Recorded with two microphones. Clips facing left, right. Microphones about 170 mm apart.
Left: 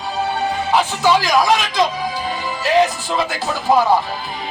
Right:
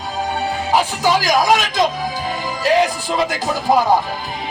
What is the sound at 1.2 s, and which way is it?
Speech, 40° right (ahead or behind).